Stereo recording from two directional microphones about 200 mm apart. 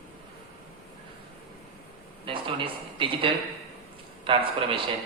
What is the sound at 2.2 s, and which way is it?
A man's voice, 25° right (ahead or behind).